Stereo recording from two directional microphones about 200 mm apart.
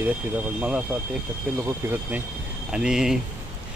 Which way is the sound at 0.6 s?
5° right (ahead or behind).